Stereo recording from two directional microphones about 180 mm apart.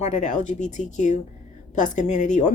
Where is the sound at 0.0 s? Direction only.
40° left (ahead or behind).